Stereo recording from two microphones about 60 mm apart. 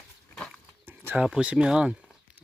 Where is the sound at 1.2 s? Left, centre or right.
Centre.